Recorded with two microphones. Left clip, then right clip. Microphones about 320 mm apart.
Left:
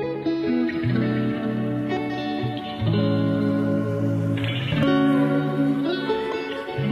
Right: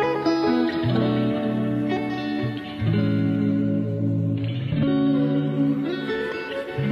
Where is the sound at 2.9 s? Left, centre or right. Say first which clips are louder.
Left 2 dB; centre.